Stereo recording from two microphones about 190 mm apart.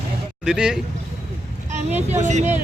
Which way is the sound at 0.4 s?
5° right (ahead or behind).